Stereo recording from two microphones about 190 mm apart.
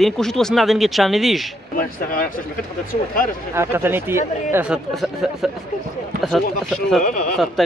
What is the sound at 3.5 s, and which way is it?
Speech, 15° right (ahead or behind).